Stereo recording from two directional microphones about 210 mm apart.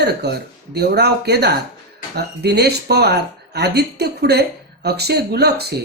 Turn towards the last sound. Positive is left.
turn(degrees=-50)  # may be behind; listen again after turning